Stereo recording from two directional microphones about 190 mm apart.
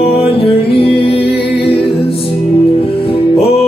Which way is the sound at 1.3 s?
55° left (ahead or behind).